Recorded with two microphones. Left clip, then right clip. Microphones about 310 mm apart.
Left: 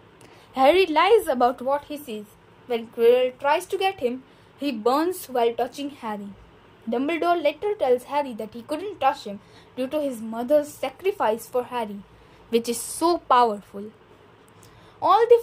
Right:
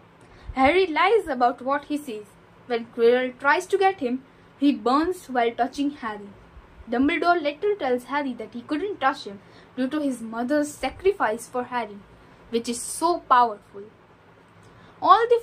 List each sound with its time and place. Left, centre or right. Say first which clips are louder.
0.6 s a woman's voice: left 2 dB; left
15.0 s a woman's voice: left 1 dB; left